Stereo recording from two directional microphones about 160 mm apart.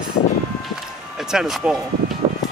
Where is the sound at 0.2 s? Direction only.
50° left (ahead or behind).